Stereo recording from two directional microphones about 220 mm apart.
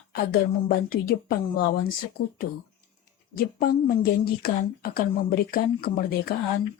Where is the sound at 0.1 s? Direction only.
45° left (ahead or behind).